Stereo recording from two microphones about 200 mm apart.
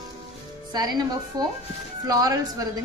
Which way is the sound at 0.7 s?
20° right (ahead or behind).